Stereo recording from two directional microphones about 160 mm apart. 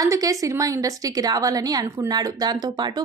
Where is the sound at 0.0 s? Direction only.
20° right (ahead or behind).